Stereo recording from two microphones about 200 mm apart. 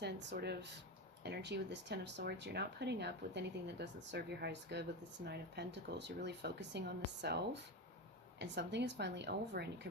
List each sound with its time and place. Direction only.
0.0 s speech: 60° right (ahead or behind)